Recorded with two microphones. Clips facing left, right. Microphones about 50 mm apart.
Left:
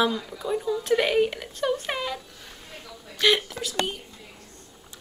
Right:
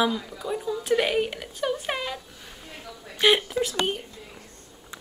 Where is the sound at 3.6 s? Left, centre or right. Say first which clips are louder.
Right 2 dB; right.